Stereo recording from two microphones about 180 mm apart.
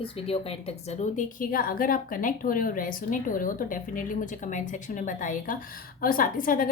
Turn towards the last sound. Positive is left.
turn(degrees=50)  # may be behind; listen again after turning